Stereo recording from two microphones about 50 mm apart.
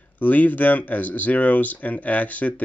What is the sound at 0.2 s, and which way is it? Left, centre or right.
Speech, left.